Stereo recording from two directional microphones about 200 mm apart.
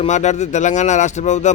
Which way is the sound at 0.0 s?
35° left (ahead or behind).